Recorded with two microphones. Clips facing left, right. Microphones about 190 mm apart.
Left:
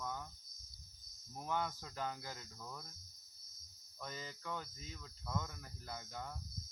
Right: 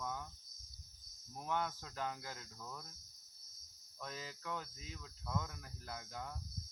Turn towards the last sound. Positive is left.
turn(degrees=0)  # may be behind; listen again after turning